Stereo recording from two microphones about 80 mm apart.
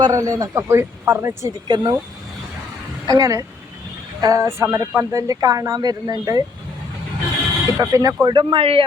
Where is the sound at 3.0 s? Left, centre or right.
Right.